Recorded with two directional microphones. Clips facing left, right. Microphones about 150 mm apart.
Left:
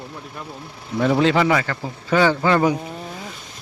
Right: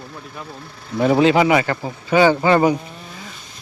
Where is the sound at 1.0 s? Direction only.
10° right (ahead or behind).